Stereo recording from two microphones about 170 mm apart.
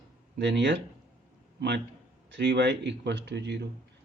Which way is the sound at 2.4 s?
90° right.